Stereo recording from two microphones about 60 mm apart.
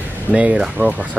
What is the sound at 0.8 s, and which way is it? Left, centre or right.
Speech, right.